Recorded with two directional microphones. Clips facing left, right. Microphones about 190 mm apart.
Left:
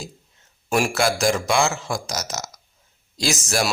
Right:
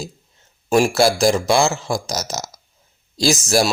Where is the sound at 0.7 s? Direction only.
35° right (ahead or behind).